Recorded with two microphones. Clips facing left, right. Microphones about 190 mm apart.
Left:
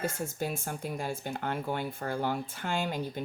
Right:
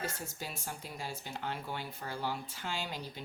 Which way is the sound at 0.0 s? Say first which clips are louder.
Left 8 dB; 50° left (ahead or behind).